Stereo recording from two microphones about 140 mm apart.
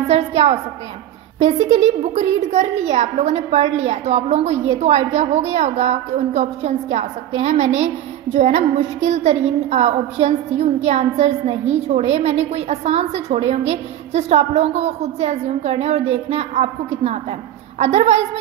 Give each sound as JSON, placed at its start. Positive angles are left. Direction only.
{"t": 0.0, "sound": "a woman's voice", "side_deg": -50}